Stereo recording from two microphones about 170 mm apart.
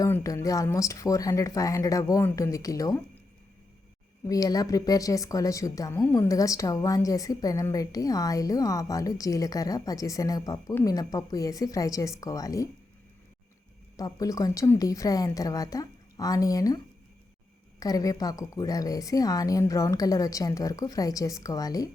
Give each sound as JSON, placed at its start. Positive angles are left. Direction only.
{"t": 0.0, "sound": "a woman's voice", "side_deg": 20}
{"t": 4.3, "sound": "a woman's voice", "side_deg": 20}
{"t": 13.9, "sound": "a woman's voice", "side_deg": 20}